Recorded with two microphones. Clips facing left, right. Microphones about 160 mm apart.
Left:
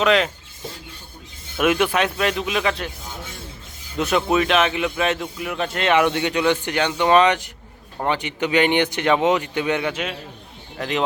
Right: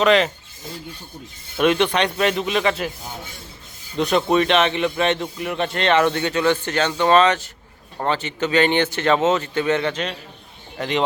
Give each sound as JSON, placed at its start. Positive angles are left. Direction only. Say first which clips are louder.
{"t": 0.0, "sound": "a man's voice", "louder": "right 2 dB", "side_deg": 0}
{"t": 1.5, "sound": "a man's voice", "louder": "right 1 dB", "side_deg": 5}
{"t": 3.9, "sound": "a man's voice", "louder": "right 1 dB", "side_deg": 0}